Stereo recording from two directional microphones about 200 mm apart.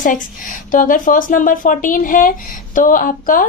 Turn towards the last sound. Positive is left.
turn(degrees=40)  # may be behind; listen again after turning